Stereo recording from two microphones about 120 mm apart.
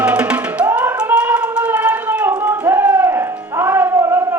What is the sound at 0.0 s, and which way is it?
Music, 10° right (ahead or behind).